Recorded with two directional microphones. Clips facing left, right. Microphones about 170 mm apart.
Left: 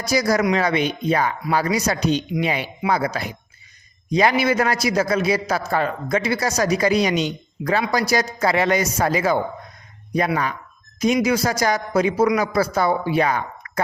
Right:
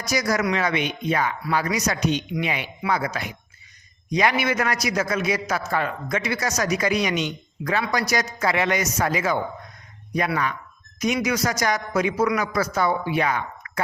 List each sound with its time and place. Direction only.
0.0 s a man's voice: 30° left (ahead or behind)